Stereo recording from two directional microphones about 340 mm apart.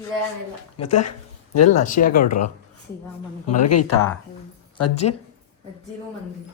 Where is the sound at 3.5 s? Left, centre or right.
Left.